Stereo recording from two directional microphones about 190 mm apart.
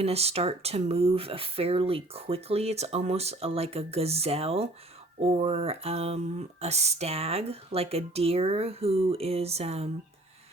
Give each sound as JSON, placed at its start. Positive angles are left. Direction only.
{"t": 0.0, "sound": "speech", "side_deg": -35}